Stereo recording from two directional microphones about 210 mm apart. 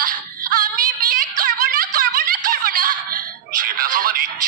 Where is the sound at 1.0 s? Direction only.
45° right (ahead or behind).